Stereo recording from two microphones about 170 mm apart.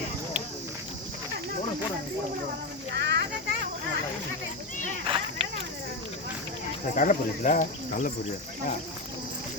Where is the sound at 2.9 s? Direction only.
90° right.